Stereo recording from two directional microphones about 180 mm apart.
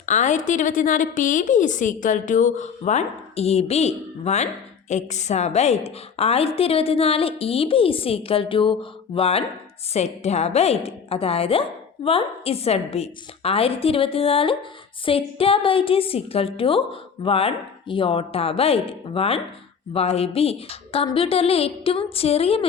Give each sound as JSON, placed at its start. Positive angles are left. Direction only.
{"t": 0.0, "sound": "a woman's voice", "side_deg": 40}